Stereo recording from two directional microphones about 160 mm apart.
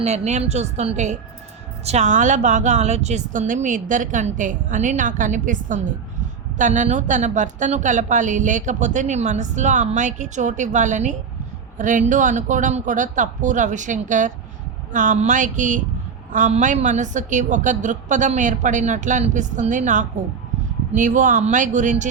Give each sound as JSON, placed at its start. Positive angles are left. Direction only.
{"t": 0.0, "sound": "a woman's voice", "side_deg": -45}